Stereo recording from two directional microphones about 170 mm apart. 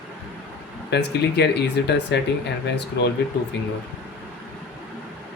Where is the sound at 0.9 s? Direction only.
80° left.